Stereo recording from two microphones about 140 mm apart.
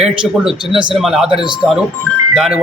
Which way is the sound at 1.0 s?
Centre (ahead or behind).